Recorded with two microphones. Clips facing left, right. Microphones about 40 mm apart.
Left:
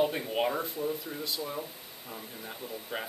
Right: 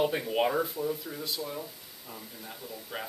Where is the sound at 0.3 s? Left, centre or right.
Centre.